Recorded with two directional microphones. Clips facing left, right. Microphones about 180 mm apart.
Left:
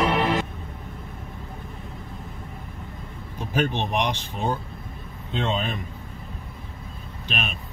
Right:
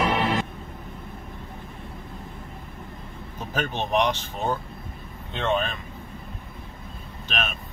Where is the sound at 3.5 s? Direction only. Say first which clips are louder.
Even; 10° left (ahead or behind).